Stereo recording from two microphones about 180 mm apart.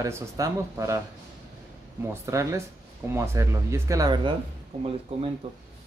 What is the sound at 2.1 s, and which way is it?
Speech, 15° right (ahead or behind).